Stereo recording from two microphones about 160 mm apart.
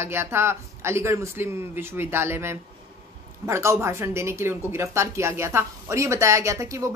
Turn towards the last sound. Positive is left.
turn(degrees=-20)  # may be behind; listen again after turning